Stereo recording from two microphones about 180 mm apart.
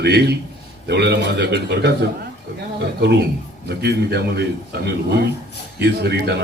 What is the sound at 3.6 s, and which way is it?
Speech, 65° right (ahead or behind).